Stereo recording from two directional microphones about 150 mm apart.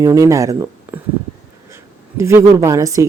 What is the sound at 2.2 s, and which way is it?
Speech, 20° right (ahead or behind).